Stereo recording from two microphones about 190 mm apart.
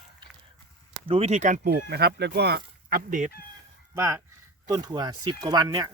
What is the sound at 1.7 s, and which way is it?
Speech, 60° right (ahead or behind).